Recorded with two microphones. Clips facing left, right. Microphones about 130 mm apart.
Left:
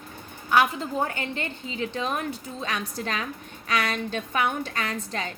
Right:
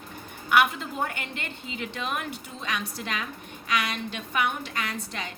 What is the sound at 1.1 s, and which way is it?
A woman's voice, 35° left (ahead or behind).